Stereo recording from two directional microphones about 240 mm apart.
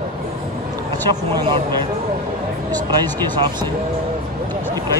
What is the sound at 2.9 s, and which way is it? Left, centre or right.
Speech, centre.